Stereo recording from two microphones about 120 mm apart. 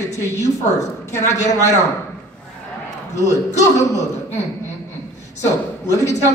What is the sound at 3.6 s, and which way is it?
Speech, 25° left (ahead or behind).